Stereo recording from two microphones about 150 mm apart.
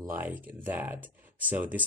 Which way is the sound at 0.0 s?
15° right (ahead or behind).